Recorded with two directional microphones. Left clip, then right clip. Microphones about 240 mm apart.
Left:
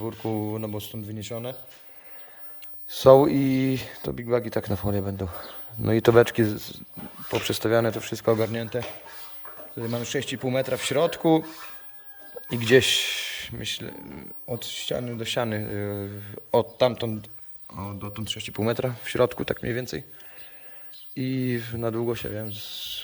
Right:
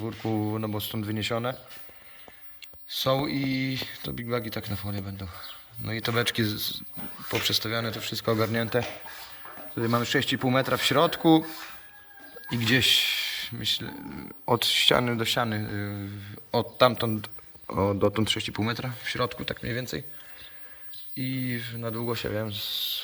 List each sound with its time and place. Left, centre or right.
0.0 s speech: centre
2.9 s speech: left
8.5 s speech: centre
12.5 s speech: centre
14.4 s speech: centre
18.3 s speech: centre
18.6 s speech: centre
21.2 s speech: left